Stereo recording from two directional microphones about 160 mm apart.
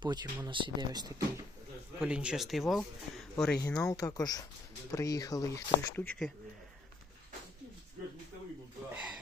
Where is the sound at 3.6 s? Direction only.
20° left (ahead or behind).